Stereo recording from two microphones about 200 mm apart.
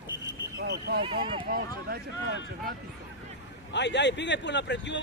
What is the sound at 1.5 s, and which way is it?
Speech, 50° right (ahead or behind).